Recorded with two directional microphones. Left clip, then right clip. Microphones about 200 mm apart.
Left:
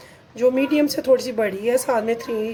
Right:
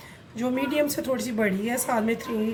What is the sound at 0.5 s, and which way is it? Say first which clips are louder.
Speech: left 5 dB; 45° left (ahead or behind).